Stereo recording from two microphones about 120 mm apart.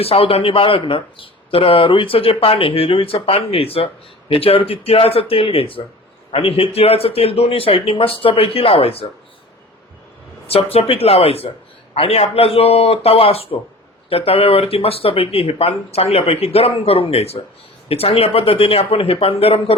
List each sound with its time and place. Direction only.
0.0 s speech: 55° left (ahead or behind)
10.4 s speech: 55° left (ahead or behind)